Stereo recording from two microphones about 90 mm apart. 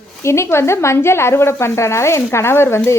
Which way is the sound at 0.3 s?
30° left (ahead or behind).